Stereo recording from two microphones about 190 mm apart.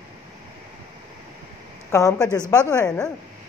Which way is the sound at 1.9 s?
15° left (ahead or behind).